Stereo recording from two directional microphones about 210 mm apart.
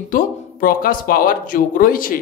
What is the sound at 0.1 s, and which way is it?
Speech, 40° left (ahead or behind).